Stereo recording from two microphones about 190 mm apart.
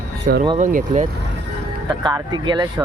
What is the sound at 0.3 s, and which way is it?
Speech, 45° right (ahead or behind).